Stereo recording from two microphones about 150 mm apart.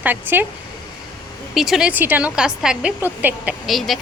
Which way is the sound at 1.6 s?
Centre (ahead or behind).